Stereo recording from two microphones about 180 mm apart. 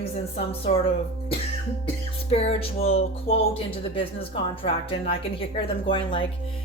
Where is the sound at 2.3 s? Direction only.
35° left (ahead or behind).